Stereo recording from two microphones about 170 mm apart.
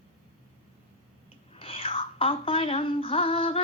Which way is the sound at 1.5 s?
35° left (ahead or behind).